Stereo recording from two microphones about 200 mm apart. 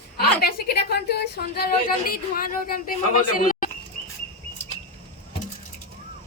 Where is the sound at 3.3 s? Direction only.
45° left (ahead or behind).